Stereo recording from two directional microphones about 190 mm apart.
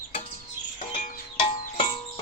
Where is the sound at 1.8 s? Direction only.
25° left (ahead or behind).